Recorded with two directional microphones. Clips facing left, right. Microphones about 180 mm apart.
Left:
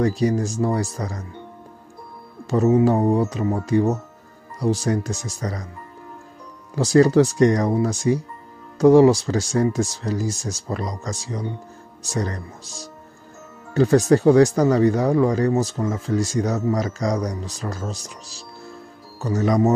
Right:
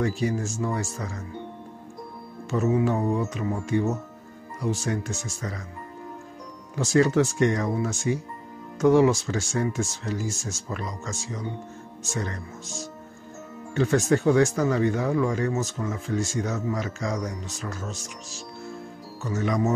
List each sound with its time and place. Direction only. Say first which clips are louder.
0.0 s speech: left 6 dB; 35° left (ahead or behind)
2.5 s speech: left 6 dB; 35° left (ahead or behind)
6.7 s speech: left 6 dB; 35° left (ahead or behind)